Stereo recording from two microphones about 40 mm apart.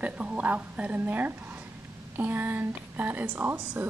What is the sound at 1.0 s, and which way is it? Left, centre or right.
A woman's voice, right.